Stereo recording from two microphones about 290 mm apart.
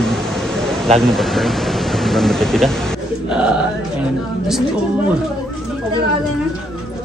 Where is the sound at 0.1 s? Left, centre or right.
Centre.